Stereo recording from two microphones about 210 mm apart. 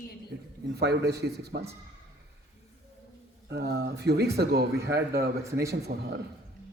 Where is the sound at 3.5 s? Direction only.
50° right (ahead or behind).